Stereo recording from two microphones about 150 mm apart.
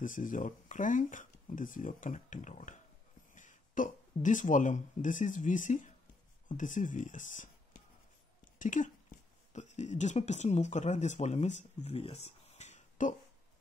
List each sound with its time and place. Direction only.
0.0 s speech: 60° left (ahead or behind)